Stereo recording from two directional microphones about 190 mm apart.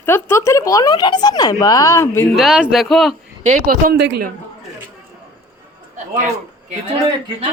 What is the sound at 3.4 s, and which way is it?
Speech, 45° right (ahead or behind).